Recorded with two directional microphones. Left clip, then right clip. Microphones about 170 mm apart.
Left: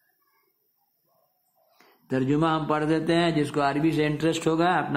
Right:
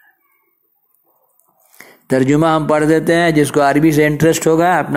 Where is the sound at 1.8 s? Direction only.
40° right (ahead or behind).